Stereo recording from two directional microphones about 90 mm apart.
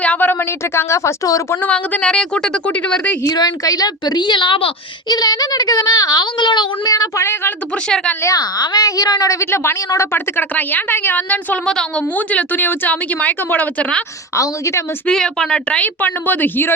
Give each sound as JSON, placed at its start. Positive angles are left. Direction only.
{"t": 0.0, "sound": "a woman's voice", "side_deg": 20}
{"t": 1.6, "sound": "speech", "side_deg": 15}
{"t": 3.2, "sound": "a child's voice", "side_deg": 45}
{"t": 5.0, "sound": "a child's voice", "side_deg": 50}
{"t": 6.9, "sound": "a sound", "side_deg": 35}
{"t": 7.9, "sound": "speech", "side_deg": 5}
{"t": 8.2, "sound": "a woman's voice", "side_deg": 45}
{"t": 14.3, "sound": "a sound", "side_deg": 35}
{"t": 15.0, "sound": "speech", "side_deg": 5}